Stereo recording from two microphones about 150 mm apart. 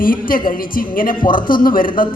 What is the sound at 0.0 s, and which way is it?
A woman's voice, 70° left (ahead or behind).